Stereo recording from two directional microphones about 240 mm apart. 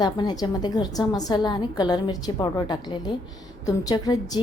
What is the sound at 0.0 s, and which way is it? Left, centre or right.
A woman's voice, centre.